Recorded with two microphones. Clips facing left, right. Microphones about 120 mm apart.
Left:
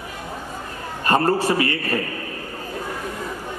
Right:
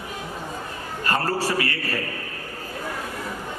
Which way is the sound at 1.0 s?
20° left (ahead or behind).